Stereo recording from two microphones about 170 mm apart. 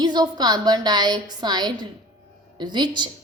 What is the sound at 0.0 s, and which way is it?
A woman's voice, 25° right (ahead or behind).